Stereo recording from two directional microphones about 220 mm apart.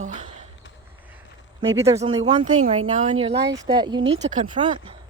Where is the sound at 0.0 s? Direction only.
35° right (ahead or behind).